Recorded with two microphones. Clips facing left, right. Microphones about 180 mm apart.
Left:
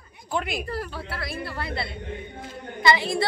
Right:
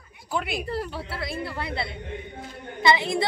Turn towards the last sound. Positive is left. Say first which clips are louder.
# even
turn(degrees=-20)  # may be behind; listen again after turning